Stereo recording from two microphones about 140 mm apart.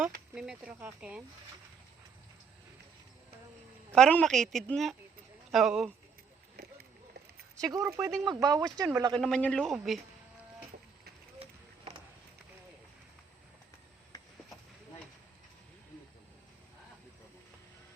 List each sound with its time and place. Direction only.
0.3 s speech: 5° right (ahead or behind)
3.9 s a woman's voice: 5° left (ahead or behind)
7.5 s speech: 25° right (ahead or behind)
9.1 s a woman's voice: 5° left (ahead or behind)